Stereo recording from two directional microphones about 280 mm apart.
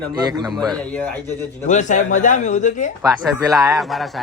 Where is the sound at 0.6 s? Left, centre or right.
Centre.